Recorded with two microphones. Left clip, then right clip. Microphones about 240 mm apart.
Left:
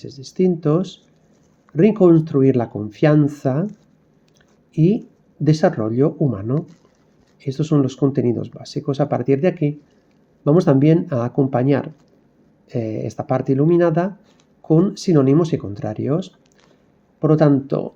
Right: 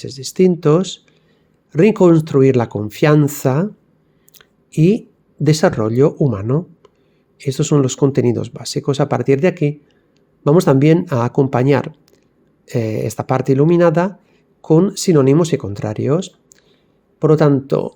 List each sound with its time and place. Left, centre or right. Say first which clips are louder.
0.0 s speech: right 5 dB; right